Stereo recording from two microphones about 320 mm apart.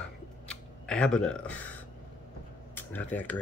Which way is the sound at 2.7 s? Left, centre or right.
Centre.